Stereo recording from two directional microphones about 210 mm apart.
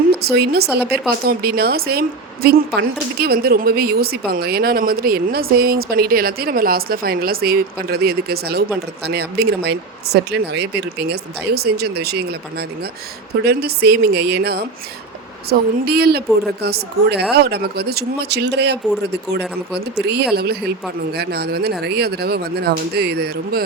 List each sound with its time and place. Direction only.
0.1 s speech: 50° right (ahead or behind)